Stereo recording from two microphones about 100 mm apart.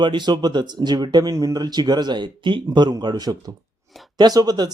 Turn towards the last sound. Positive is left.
turn(degrees=-40)  # may be behind; listen again after turning